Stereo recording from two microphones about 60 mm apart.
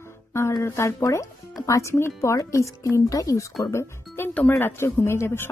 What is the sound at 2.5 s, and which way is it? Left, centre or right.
Speech, left.